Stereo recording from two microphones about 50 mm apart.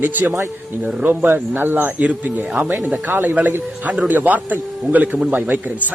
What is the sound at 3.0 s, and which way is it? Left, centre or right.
A man's voice, right.